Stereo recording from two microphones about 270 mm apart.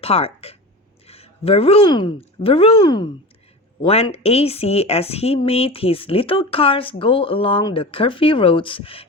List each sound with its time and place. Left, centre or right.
0.0 s a woman's voice: left